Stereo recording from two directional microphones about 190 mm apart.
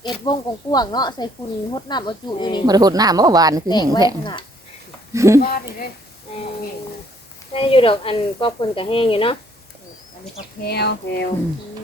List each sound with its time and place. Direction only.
0.0 s speech: 20° left (ahead or behind)
2.6 s speech: 20° right (ahead or behind)
3.7 s speech: 20° left (ahead or behind)
5.1 s speech: 15° right (ahead or behind)
5.4 s speech: 50° left (ahead or behind)
7.5 s speech: 30° left (ahead or behind)
10.6 s speech: 60° left (ahead or behind)